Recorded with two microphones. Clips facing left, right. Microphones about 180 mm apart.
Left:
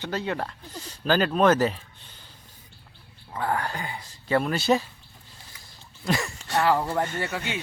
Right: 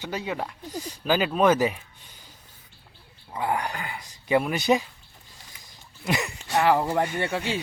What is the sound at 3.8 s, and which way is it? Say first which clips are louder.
Speech: left 1 dB; 30° left (ahead or behind).